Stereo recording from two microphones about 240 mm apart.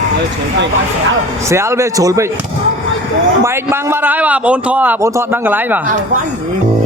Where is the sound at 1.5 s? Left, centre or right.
Centre.